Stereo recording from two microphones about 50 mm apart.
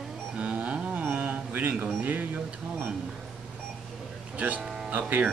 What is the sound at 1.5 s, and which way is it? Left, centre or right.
Speech, right.